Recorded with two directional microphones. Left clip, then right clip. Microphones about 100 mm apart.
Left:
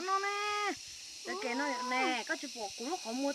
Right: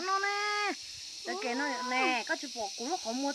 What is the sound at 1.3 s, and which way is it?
Speech, 10° right (ahead or behind).